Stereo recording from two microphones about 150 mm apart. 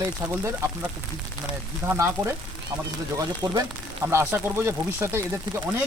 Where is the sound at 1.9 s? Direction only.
20° right (ahead or behind).